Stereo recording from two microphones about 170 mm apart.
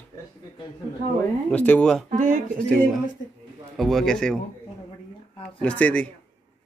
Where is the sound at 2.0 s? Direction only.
50° right (ahead or behind).